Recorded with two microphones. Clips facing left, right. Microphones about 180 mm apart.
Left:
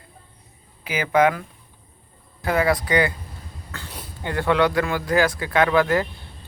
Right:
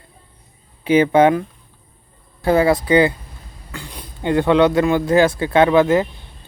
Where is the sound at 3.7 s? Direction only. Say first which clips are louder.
Right 4 dB; 15° right (ahead or behind).